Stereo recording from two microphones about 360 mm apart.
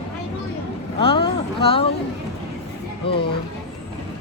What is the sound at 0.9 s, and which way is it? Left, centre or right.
Speech, centre.